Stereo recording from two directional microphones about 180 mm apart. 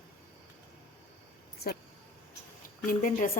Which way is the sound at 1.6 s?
60° left (ahead or behind).